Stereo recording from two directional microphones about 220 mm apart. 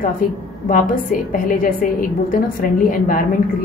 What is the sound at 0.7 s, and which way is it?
A woman's voice, 40° left (ahead or behind).